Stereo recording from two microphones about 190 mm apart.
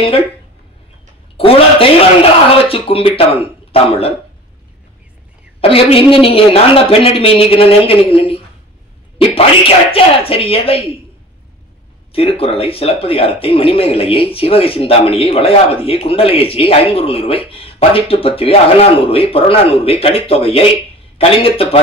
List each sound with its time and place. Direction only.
1.3 s speech: 30° left (ahead or behind)
5.6 s speech: 30° left (ahead or behind)
12.1 s speech: 30° left (ahead or behind)